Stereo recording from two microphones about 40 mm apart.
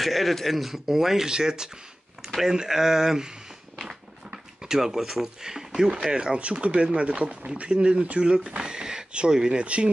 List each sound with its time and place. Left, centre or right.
0.0 s speech: centre; by 9.8 s right